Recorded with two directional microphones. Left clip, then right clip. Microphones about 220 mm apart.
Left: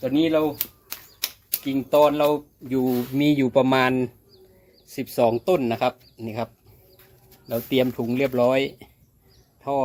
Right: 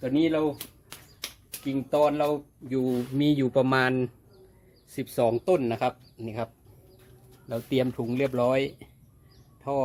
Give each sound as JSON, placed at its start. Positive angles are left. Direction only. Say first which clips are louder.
{"t": 0.0, "sound": "speech", "louder": "left 4 dB", "side_deg": 15}